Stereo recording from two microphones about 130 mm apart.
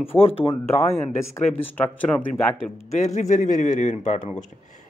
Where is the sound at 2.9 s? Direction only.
60° left (ahead or behind).